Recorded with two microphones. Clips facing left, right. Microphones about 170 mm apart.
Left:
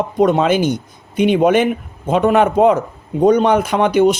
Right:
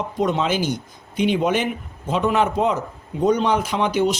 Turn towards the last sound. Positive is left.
turn(degrees=55)  # may be behind; listen again after turning